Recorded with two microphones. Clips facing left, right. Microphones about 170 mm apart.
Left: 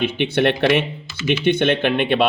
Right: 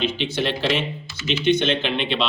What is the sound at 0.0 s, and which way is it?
Speech, 60° left (ahead or behind).